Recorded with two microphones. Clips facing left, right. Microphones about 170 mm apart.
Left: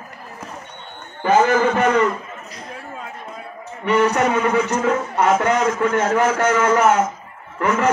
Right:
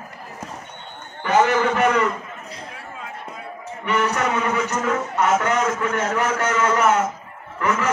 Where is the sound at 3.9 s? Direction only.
30° left (ahead or behind).